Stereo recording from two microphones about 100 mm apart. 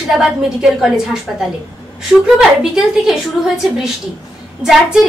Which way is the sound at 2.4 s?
5° right (ahead or behind).